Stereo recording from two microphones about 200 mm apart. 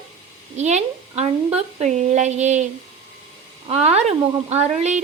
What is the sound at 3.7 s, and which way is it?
A woman's voice, 30° right (ahead or behind).